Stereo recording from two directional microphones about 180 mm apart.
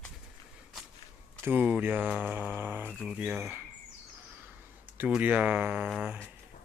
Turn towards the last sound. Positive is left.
turn(degrees=-5)  # may be behind; listen again after turning